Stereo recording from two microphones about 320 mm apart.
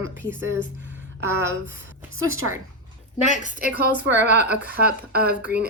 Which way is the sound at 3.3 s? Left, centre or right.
Left.